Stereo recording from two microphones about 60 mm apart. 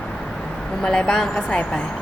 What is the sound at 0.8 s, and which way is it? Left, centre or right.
Speech, centre.